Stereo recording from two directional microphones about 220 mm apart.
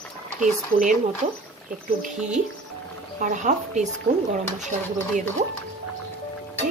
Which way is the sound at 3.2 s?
35° right (ahead or behind).